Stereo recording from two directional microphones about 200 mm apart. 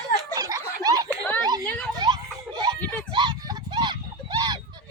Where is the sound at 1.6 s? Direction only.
5° left (ahead or behind).